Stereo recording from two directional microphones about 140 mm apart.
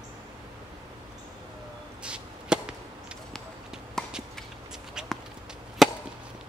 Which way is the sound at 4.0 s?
5° left (ahead or behind).